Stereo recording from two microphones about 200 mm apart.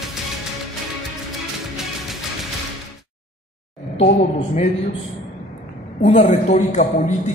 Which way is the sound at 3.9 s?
35° left (ahead or behind).